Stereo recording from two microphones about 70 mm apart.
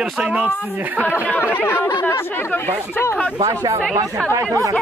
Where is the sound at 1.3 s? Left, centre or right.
Left.